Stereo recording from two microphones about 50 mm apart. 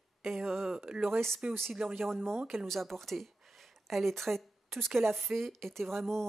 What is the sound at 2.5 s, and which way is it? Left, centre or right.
Speech, centre.